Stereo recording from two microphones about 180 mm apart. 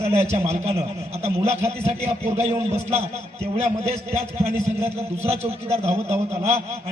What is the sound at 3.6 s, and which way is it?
A man's voice, 35° right (ahead or behind).